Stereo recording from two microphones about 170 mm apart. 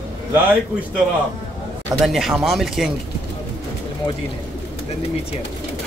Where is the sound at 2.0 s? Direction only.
Centre (ahead or behind).